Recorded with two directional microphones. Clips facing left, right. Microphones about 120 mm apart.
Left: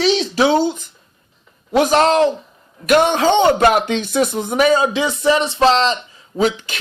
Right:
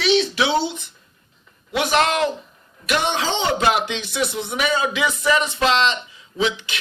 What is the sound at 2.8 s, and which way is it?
Speech, 50° left (ahead or behind).